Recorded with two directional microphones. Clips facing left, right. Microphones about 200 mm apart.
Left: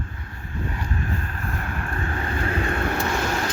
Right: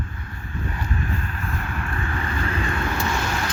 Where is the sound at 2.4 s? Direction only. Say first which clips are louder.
Left 2 dB; 55° left (ahead or behind).